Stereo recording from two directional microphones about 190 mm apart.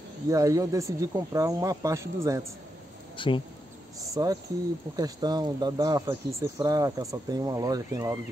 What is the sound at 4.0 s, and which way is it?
Speech, 20° right (ahead or behind).